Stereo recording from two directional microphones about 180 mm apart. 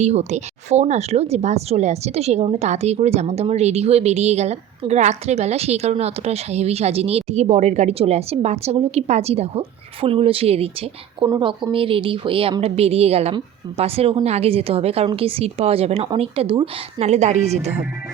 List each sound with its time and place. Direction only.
0.0 s speech: 40° right (ahead or behind)